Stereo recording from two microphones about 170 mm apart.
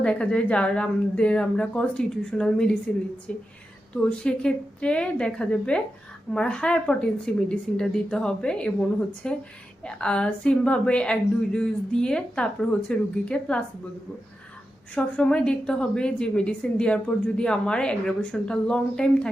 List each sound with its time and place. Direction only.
0.0 s a woman's voice: 5° left (ahead or behind)
14.9 s a woman's voice: 5° left (ahead or behind)